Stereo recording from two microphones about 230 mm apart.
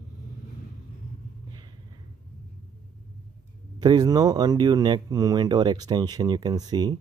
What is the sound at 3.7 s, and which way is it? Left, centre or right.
Speech, centre.